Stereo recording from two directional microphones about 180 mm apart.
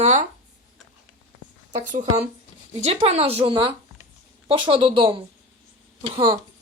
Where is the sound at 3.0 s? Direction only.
35° right (ahead or behind).